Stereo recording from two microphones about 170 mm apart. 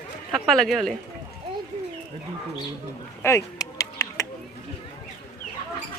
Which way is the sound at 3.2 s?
20° left (ahead or behind).